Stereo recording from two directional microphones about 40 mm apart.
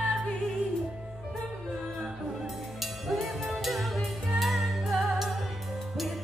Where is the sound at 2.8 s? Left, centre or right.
Centre.